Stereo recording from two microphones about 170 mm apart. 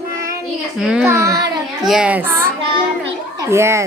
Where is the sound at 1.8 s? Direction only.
5° right (ahead or behind).